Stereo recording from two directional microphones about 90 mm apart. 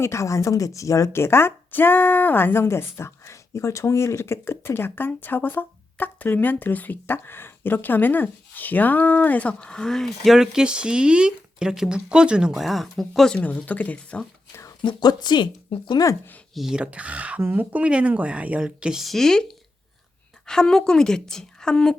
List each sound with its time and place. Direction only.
0.0 s a woman's voice: 35° left (ahead or behind); by 13.4 s 5° left (ahead or behind)
13.4 s a woman's voice: 15° left (ahead or behind)
14.8 s a woman's voice: 55° left (ahead or behind)
16.6 s speech: 5° right (ahead or behind)
20.5 s a woman's voice: 5° left (ahead or behind)